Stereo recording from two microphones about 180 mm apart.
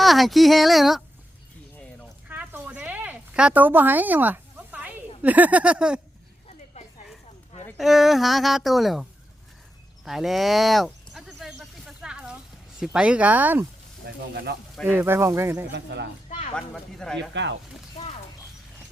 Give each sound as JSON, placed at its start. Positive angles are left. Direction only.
{"t": 0.0, "sound": "speech", "side_deg": 0}
{"t": 2.3, "sound": "a sound", "side_deg": -10}
{"t": 6.8, "sound": "a sound", "side_deg": 35}
{"t": 7.8, "sound": "speech", "side_deg": 0}
{"t": 10.0, "sound": "a sound", "side_deg": 0}
{"t": 12.8, "sound": "speech", "side_deg": -5}
{"t": 14.0, "sound": "speech", "side_deg": -65}
{"t": 14.8, "sound": "speech", "side_deg": -10}
{"t": 15.7, "sound": "speech", "side_deg": -75}
{"t": 16.6, "sound": "speech", "side_deg": 5}
{"t": 17.3, "sound": "speech", "side_deg": -85}